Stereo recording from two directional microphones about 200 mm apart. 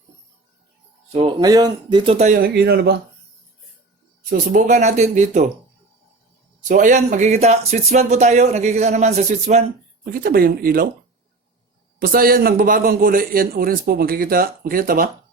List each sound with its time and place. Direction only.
1.1 s speech: 25° right (ahead or behind); by 3.0 s 55° right (ahead or behind)
4.3 s speech: 40° right (ahead or behind)
6.7 s speech: 40° right (ahead or behind)
10.1 s a man's voice: 45° right (ahead or behind)
11.9 s a man's voice: 45° right (ahead or behind)